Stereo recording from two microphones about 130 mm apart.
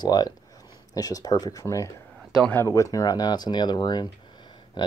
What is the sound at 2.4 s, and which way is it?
Speech, 15° left (ahead or behind).